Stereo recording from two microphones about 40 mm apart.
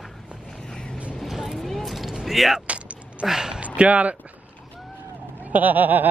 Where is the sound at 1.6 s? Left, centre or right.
Centre.